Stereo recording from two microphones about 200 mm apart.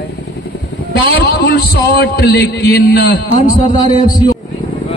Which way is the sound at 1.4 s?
50° left (ahead or behind).